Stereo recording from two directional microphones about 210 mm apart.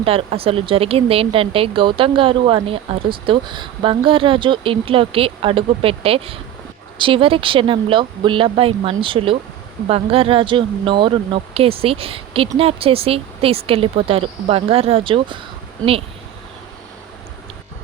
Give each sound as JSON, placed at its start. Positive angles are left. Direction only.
{"t": 0.0, "sound": "speech", "side_deg": -25}